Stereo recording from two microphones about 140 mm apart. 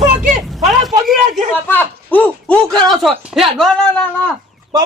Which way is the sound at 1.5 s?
10° left (ahead or behind).